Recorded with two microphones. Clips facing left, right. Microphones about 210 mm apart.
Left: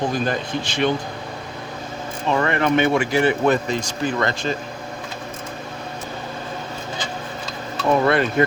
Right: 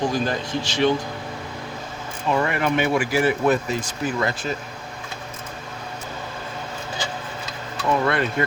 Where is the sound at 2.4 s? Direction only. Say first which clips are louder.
Left 3 dB; 5° right (ahead or behind).